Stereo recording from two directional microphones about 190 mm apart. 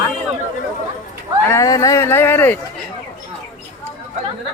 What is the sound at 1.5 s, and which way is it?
Speech, 15° left (ahead or behind).